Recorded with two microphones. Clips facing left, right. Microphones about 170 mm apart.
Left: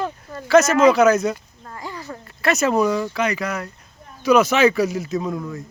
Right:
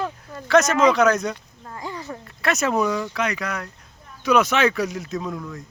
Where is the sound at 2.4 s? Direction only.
Centre (ahead or behind).